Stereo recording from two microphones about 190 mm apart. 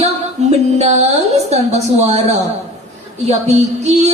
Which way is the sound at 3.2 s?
35° right (ahead or behind).